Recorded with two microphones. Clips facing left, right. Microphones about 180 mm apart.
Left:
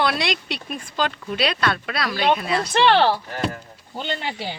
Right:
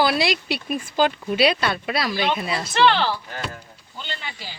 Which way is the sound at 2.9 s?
55° left (ahead or behind).